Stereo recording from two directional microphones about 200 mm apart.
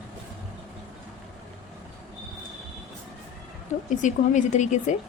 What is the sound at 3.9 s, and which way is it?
A woman's voice, 40° left (ahead or behind).